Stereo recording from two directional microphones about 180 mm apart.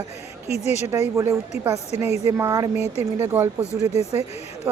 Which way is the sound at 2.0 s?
35° left (ahead or behind).